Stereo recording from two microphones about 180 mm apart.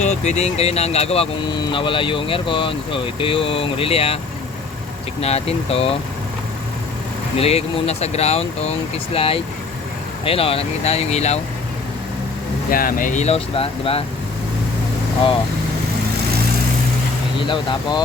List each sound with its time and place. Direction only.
0.0 s speech: 40° left (ahead or behind)
5.2 s speech: 35° left (ahead or behind)
7.3 s speech: 35° left (ahead or behind)
12.7 s speech: 50° left (ahead or behind); by 14.0 s 30° left (ahead or behind)
17.5 s speech: 25° left (ahead or behind)